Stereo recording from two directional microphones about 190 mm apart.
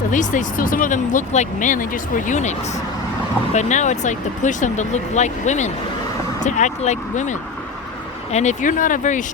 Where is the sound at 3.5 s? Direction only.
40° left (ahead or behind).